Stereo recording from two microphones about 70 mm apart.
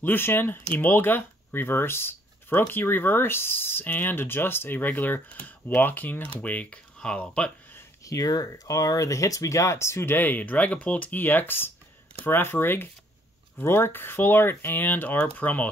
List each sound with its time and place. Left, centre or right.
0.0 s speech: left
8.0 s speech: left